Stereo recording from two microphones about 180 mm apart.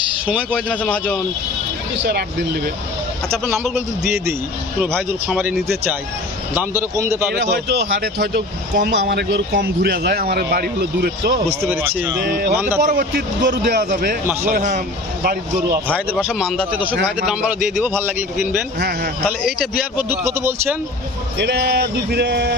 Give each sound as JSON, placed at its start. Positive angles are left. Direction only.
{"t": 0.5, "sound": "a man's voice", "side_deg": 5}
{"t": 2.0, "sound": "speech", "side_deg": -70}
{"t": 3.4, "sound": "speech", "side_deg": 0}
{"t": 6.6, "sound": "speech", "side_deg": -15}
{"t": 7.5, "sound": "speech", "side_deg": -70}
{"t": 11.6, "sound": "speech", "side_deg": -15}
{"t": 12.2, "sound": "speech", "side_deg": -55}
{"t": 12.5, "sound": "speech", "side_deg": -10}
{"t": 12.9, "sound": "a man's voice", "side_deg": -50}
{"t": 16.0, "sound": "speech", "side_deg": 0}
{"t": 18.8, "sound": "speech", "side_deg": -60}
{"t": 19.2, "sound": "speech", "side_deg": 0}
{"t": 20.1, "sound": "speech", "side_deg": -10}
{"t": 21.3, "sound": "a sound", "side_deg": -70}